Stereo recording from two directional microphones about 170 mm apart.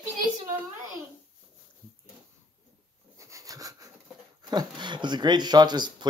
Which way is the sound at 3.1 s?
20° right (ahead or behind).